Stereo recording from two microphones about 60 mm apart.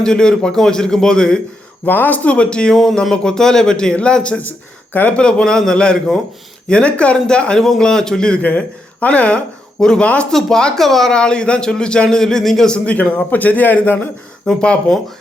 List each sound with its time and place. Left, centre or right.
0.0 s a man's voice: centre
1.8 s a man's voice: left; by 8.4 s centre
8.4 s a man's voice: left; by 11.1 s centre
11.1 s a man's voice: centre; by 14.1 s left
14.4 s a man's voice: centre